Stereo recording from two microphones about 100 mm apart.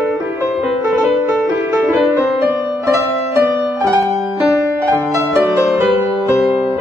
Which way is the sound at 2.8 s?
25° right (ahead or behind).